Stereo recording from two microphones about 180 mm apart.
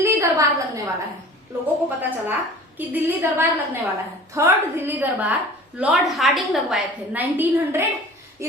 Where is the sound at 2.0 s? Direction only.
10° right (ahead or behind).